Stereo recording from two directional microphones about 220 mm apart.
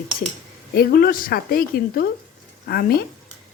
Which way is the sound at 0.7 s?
45° left (ahead or behind).